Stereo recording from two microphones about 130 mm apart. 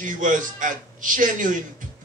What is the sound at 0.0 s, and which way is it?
A man's voice, 90° right.